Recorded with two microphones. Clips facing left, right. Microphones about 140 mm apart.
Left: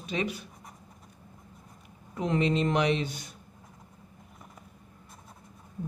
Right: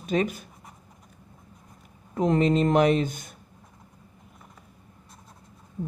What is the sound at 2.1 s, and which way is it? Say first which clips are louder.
Speech: right 5 dB; 40° right (ahead or behind).